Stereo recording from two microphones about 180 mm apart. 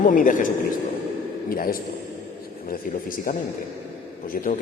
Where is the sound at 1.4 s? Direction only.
55° left (ahead or behind).